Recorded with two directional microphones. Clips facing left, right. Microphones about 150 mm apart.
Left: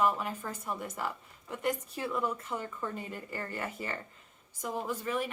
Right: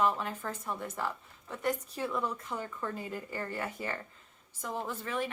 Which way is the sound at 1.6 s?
10° left (ahead or behind).